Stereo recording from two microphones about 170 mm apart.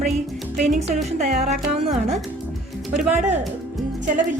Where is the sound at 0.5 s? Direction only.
45° right (ahead or behind).